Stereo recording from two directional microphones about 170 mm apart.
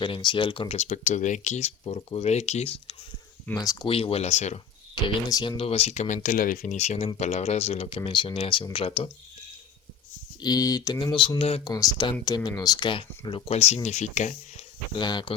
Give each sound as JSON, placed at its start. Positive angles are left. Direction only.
{"t": 0.0, "sound": "speech", "side_deg": 30}
{"t": 3.6, "sound": "speech", "side_deg": 20}
{"t": 3.8, "sound": "speech", "side_deg": 35}
{"t": 4.9, "sound": "speech", "side_deg": 25}
{"t": 6.2, "sound": "speech", "side_deg": 55}
{"t": 10.4, "sound": "speech", "side_deg": 20}
{"t": 11.7, "sound": "speech", "side_deg": 20}
{"t": 14.9, "sound": "speech", "side_deg": 25}